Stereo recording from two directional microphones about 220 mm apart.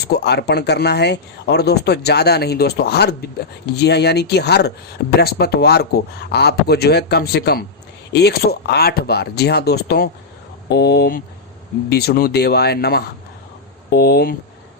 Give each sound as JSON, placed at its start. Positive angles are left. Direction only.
{"t": 0.1, "sound": "speech", "side_deg": 50}